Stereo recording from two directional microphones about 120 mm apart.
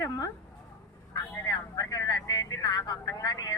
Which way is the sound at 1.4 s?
30° left (ahead or behind).